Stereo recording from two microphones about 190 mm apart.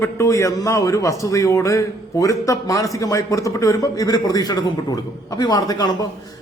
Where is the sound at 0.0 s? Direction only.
15° left (ahead or behind).